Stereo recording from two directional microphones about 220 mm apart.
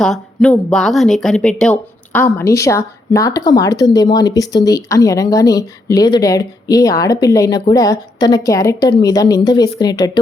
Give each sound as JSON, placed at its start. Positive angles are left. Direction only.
{"t": 0.0, "sound": "speech", "side_deg": 0}